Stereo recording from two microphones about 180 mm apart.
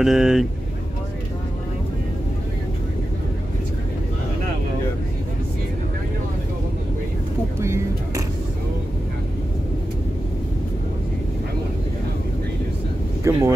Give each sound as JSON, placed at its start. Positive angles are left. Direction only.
{"t": 0.0, "sound": "speech", "side_deg": 0}
{"t": 7.6, "sound": "vehicle", "side_deg": -15}
{"t": 13.2, "sound": "speech", "side_deg": -15}